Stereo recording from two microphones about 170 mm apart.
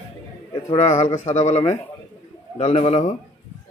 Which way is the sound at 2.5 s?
40° left (ahead or behind).